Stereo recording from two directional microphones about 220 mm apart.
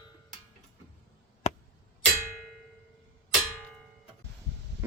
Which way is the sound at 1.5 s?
30° left (ahead or behind).